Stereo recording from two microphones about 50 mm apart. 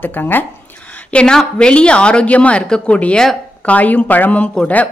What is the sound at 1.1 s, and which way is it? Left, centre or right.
A woman's voice, left.